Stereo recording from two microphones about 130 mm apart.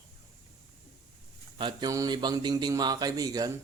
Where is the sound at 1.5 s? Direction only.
40° right (ahead or behind).